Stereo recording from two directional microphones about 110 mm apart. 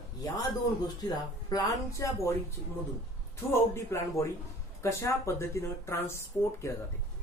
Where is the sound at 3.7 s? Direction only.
25° left (ahead or behind).